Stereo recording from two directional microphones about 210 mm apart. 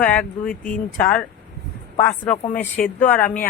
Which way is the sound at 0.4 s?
40° left (ahead or behind).